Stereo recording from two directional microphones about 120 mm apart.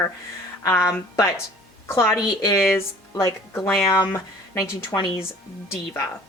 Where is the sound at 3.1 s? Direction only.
25° left (ahead or behind).